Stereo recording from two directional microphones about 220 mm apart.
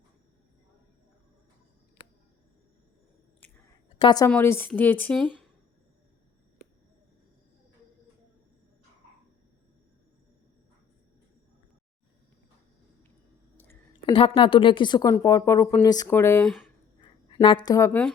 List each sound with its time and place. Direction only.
3.9 s a woman's voice: 20° left (ahead or behind)
4.3 s a woman's voice: 10° left (ahead or behind)
14.1 s a woman's voice: 25° left (ahead or behind)
16.5 s speech: centre (ahead or behind)
17.4 s a woman's voice: 20° left (ahead or behind)